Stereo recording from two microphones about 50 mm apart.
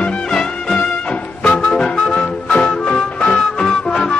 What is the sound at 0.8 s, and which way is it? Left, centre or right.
Music, left.